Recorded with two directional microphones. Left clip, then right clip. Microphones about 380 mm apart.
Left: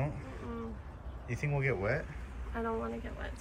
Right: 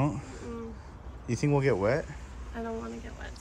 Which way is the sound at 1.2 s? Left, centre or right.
Centre.